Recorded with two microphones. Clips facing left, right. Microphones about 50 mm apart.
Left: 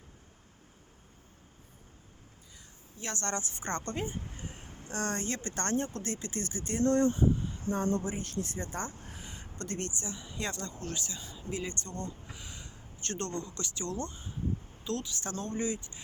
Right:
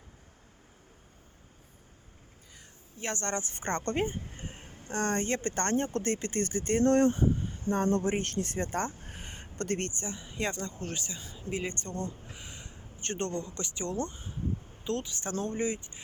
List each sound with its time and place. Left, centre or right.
3.0 s speech: right
12.3 s a sound: right
13.4 s speech: right